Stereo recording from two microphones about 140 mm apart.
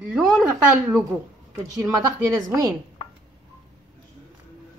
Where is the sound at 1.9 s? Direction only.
25° right (ahead or behind).